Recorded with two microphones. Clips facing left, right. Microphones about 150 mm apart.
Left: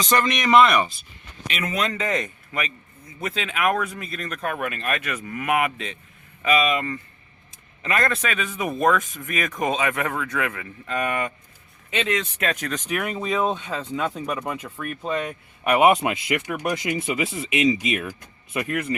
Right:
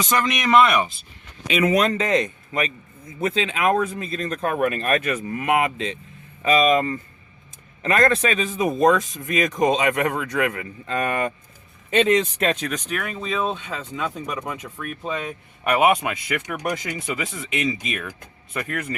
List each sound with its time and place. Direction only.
0.0 s speech: 5° right (ahead or behind)
2.0 s a man's voice: 30° right (ahead or behind)
5.2 s speech: 25° right (ahead or behind)
10.8 s speech: 35° right (ahead or behind)
12.9 s speech: 15° left (ahead or behind); by 15.4 s centre (ahead or behind)
15.8 s speech: 30° left (ahead or behind)
16.6 s speech: 10° left (ahead or behind)